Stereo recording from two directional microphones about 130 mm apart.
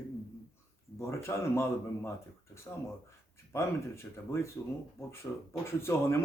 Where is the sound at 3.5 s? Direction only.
20° left (ahead or behind).